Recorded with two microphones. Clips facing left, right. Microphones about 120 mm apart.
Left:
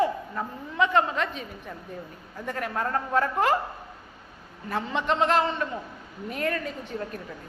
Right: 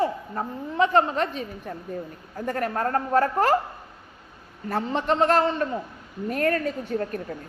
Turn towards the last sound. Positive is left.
turn(degrees=-50)  # may be behind; listen again after turning